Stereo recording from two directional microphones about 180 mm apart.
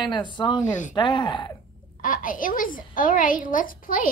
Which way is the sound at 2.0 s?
50° left (ahead or behind).